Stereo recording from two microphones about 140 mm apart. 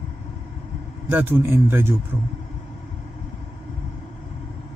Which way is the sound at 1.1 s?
15° right (ahead or behind).